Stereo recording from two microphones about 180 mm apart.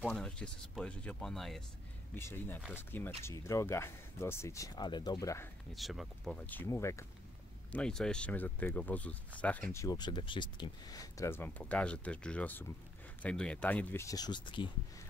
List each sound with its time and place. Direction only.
0.0 s speech: 5° left (ahead or behind)
5.8 s speech: centre (ahead or behind); by 7.1 s 15° left (ahead or behind)
7.7 s speech: 5° left (ahead or behind); by 14.7 s 25° left (ahead or behind)